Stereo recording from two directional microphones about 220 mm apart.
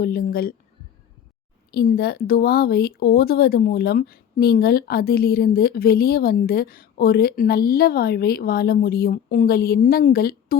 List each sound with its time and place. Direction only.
0.0 s speech: 40° left (ahead or behind)
1.7 s speech: 45° left (ahead or behind)